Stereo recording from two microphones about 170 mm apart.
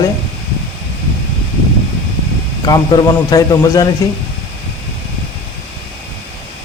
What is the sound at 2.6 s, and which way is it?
Speech, 25° left (ahead or behind).